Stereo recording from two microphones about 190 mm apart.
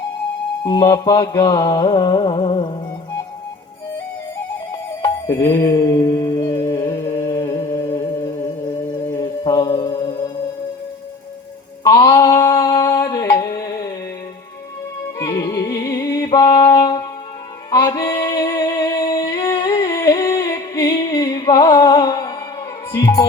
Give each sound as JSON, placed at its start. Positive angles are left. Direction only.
{"t": 0.6, "sound": "music", "side_deg": 20}
{"t": 5.0, "sound": "mantra", "side_deg": 20}
{"t": 8.9, "sound": "music", "side_deg": 25}
{"t": 11.8, "sound": "mantra", "side_deg": 20}
{"t": 15.2, "sound": "music", "side_deg": 20}